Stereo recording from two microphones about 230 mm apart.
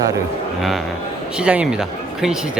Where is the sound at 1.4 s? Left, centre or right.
Centre.